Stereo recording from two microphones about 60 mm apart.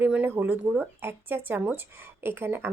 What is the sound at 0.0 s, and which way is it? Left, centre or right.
Speech, right.